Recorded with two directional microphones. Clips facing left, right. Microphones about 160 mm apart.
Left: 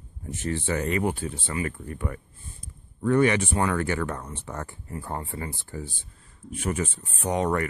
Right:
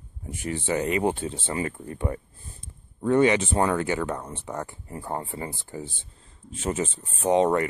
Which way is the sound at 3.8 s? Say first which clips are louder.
Right 1 dB; 15° right (ahead or behind).